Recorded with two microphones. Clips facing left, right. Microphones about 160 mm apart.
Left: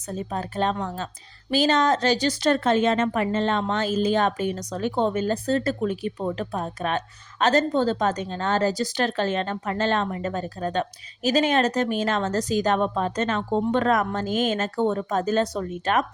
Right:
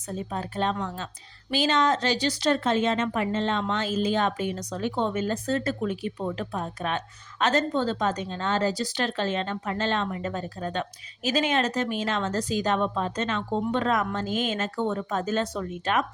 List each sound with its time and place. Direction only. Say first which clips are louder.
0.2 s a woman's voice: left 3 dB; 45° left (ahead or behind)